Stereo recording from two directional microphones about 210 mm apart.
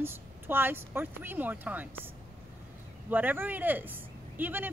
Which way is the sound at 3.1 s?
10° right (ahead or behind).